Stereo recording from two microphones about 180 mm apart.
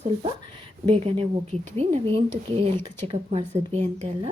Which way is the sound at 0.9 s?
30° right (ahead or behind).